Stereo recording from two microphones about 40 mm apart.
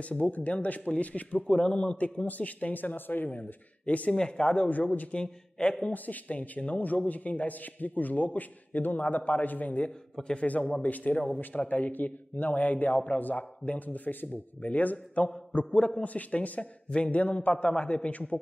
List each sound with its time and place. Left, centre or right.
0.2 s a man's voice: left
1.5 s a man's voice: left
4.1 s a man's voice: left
5.9 s a man's voice: left